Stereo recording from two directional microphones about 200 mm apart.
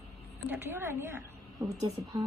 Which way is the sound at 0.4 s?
10° right (ahead or behind).